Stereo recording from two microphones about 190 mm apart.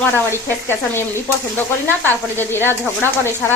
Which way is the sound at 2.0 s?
10° left (ahead or behind).